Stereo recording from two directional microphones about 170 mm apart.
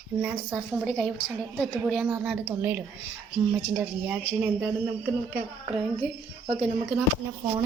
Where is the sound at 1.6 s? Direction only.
Centre (ahead or behind).